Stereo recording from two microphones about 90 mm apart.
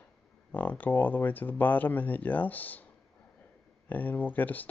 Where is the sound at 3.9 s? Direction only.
20° left (ahead or behind).